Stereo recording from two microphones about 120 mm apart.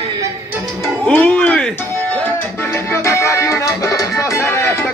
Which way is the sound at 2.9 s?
25° left (ahead or behind).